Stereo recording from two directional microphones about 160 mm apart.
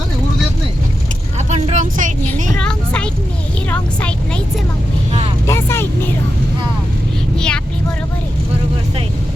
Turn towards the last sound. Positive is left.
turn(degrees=5)  # may be behind; listen again after turning